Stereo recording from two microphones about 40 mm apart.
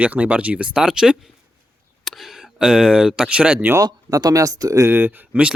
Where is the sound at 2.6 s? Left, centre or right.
Centre.